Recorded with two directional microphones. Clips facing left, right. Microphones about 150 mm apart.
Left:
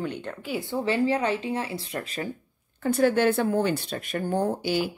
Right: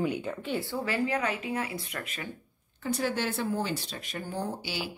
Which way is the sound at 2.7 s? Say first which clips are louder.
Left 8 dB; 50° left (ahead or behind).